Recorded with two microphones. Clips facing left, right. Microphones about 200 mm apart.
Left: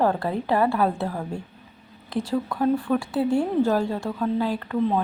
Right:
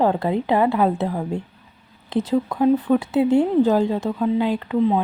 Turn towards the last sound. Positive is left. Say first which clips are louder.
# right 4 dB
turn(degrees=-15)  # may be behind; listen again after turning